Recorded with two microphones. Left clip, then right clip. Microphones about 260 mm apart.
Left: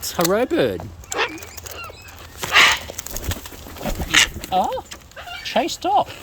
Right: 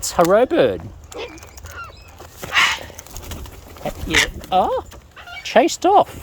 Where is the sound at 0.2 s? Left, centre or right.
Centre.